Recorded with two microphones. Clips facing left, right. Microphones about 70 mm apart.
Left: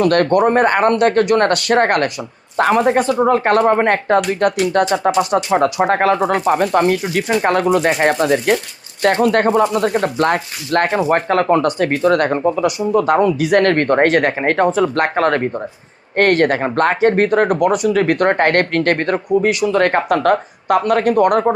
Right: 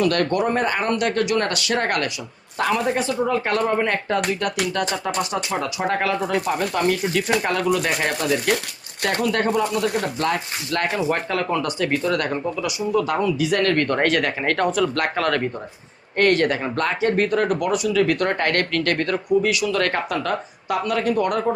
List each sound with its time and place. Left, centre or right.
0.0 s speech: left
14.4 s speech: left
16.1 s speech: left